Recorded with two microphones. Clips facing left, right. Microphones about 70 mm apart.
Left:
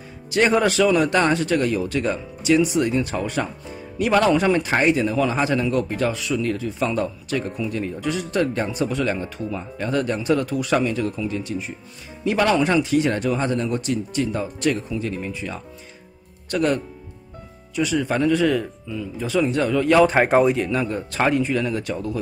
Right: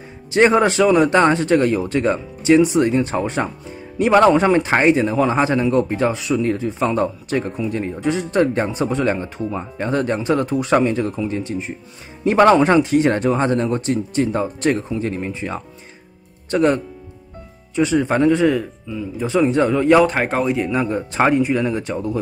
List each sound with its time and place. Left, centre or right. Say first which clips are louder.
0.3 s a man's voice: right 4 dB; right
18.5 s a man's voice: right 2 dB; centre
20.1 s a man's voice: left 3 dB; centre
20.5 s a man's voice: right 3 dB; centre